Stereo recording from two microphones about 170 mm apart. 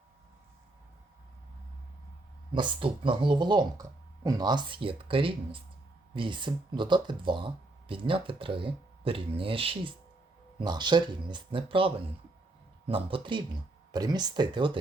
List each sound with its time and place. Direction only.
2.5 s speech: 30° right (ahead or behind)